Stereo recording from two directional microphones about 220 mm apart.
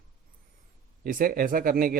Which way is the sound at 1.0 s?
40° right (ahead or behind).